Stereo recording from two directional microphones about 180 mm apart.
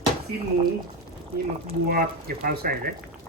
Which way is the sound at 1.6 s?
55° right (ahead or behind).